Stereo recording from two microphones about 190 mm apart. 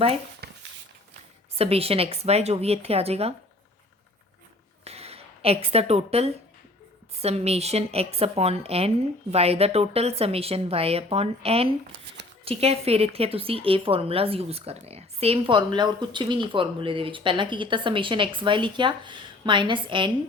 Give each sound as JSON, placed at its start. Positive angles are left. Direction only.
{"t": 0.4, "sound": "a sound", "side_deg": -60}
{"t": 1.5, "sound": "a woman's voice", "side_deg": -30}
{"t": 4.9, "sound": "a woman's voice", "side_deg": -30}